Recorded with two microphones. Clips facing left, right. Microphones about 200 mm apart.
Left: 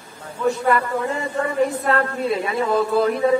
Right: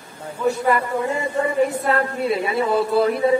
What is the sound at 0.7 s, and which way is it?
A man's voice, 10° right (ahead or behind).